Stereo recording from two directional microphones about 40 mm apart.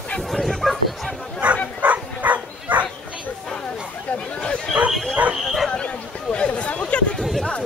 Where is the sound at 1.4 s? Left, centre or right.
Right.